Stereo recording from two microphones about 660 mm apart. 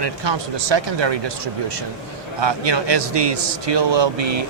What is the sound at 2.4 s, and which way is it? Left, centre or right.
A man's voice, right.